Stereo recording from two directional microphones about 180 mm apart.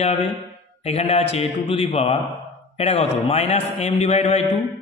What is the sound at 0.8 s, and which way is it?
A man's voice, 35° left (ahead or behind).